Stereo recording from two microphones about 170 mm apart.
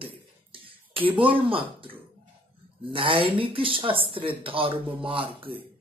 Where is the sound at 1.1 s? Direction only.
30° right (ahead or behind).